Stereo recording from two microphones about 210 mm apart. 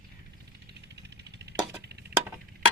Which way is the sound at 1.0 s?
55° right (ahead or behind).